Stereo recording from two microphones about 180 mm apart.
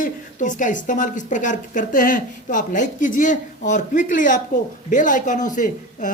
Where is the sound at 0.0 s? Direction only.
45° left (ahead or behind).